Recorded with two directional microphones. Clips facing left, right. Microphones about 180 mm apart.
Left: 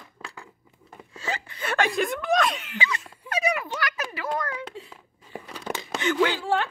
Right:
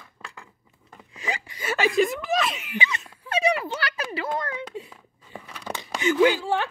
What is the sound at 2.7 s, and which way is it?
Speech, 20° right (ahead or behind).